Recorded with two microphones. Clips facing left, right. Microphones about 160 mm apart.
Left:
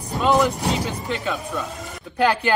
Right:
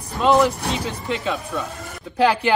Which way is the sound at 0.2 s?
Centre (ahead or behind).